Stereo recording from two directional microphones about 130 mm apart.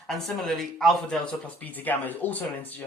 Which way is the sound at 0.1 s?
Centre (ahead or behind).